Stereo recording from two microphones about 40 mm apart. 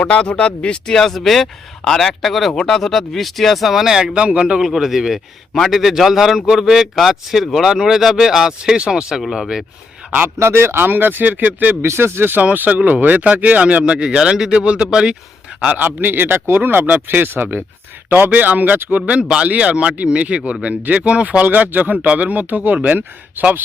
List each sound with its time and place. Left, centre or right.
0.0 s speech: left
0.9 s speech: centre
3.8 s speech: centre
4.6 s speech: centre
9.2 s speech: centre
10.4 s speech: right
10.8 s speech: right
11.8 s speech: right
12.4 s speech: right
14.8 s speech: centre
15.8 s speech: right
18.1 s speech: right
19.5 s speech: right
21.4 s speech: right